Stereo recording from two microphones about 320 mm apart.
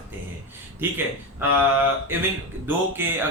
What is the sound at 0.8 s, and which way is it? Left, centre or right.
Speech, centre.